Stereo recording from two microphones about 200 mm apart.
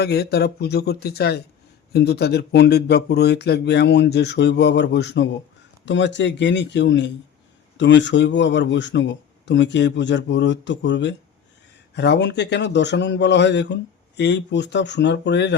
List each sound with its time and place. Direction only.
0.0 s speech: 55° left (ahead or behind)